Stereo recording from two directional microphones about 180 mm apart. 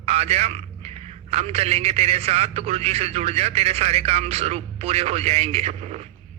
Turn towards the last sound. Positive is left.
turn(degrees=-35)  # may be behind; listen again after turning